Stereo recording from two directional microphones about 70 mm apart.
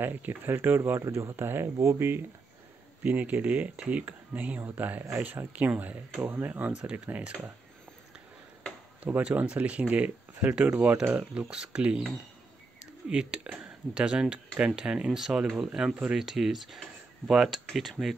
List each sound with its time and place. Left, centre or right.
0.0 s speech: right
3.0 s speech: right
6.7 s speech: centre
9.0 s speech: right
11.5 s speech: centre
13.1 s speech: centre